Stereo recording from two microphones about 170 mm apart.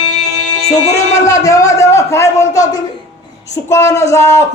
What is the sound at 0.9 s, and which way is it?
A man's voice, 20° left (ahead or behind).